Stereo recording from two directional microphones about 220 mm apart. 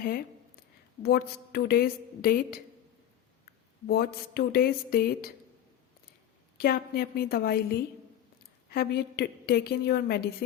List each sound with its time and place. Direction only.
1.0 s a woman's voice: 45° left (ahead or behind)
6.6 s a woman's voice: 45° left (ahead or behind)